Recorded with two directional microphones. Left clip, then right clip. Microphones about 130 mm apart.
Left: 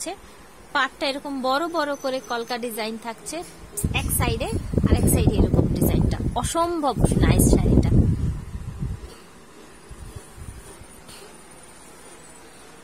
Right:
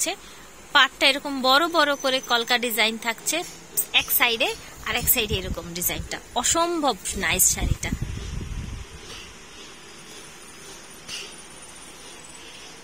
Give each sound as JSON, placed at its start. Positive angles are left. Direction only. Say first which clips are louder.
{"t": 0.7, "sound": "a woman's voice", "louder": "right 5 dB", "side_deg": 10}
{"t": 5.7, "sound": "speech", "louder": "left 5 dB", "side_deg": 15}